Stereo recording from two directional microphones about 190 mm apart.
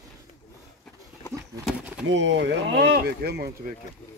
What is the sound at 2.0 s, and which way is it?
Speech, 75° right (ahead or behind).